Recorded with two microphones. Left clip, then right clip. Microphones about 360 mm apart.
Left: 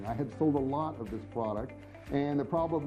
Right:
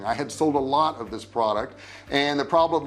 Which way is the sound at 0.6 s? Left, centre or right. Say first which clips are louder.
Right 12 dB; centre.